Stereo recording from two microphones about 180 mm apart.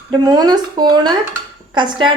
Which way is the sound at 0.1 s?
25° right (ahead or behind).